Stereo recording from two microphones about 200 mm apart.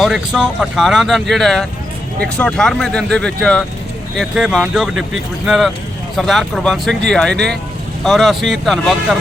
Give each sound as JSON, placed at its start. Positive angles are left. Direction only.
{"t": 0.0, "sound": "speech", "side_deg": 0}